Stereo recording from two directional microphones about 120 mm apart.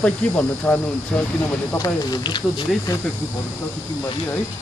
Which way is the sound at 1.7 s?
35° left (ahead or behind).